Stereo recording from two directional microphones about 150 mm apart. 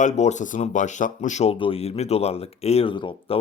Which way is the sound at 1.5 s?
35° left (ahead or behind).